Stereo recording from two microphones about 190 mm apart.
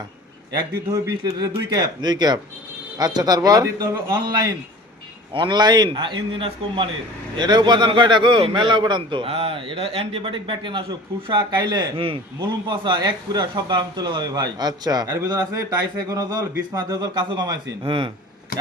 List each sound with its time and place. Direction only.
1.2 s a man's voice: 20° right (ahead or behind)